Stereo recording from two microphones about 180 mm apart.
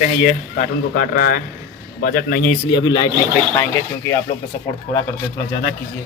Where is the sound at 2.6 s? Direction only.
25° left (ahead or behind).